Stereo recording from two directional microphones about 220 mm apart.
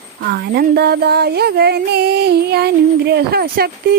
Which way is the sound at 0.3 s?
45° right (ahead or behind).